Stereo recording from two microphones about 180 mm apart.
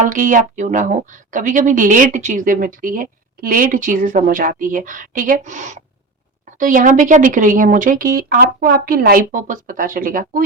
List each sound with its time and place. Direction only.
0.1 s speech: 45° right (ahead or behind)